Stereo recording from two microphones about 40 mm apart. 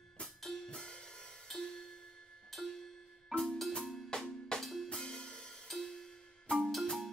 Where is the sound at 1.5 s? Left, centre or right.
Centre.